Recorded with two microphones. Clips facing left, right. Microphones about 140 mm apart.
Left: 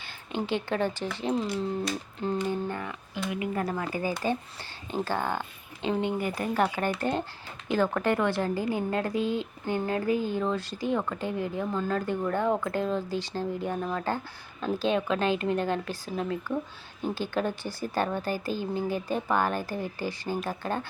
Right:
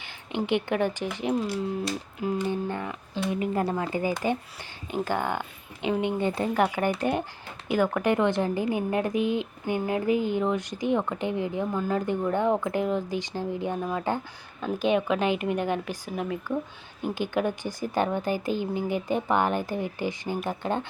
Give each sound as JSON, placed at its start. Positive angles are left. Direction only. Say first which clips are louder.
{"t": 0.0, "sound": "speech", "louder": "right 2 dB", "side_deg": -20}
{"t": 2.5, "sound": "a woman's voice", "louder": "right 2 dB", "side_deg": -20}